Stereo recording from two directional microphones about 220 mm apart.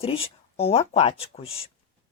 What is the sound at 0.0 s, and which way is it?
Speech, 25° left (ahead or behind).